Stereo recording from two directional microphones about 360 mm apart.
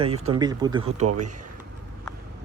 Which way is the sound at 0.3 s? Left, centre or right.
Centre.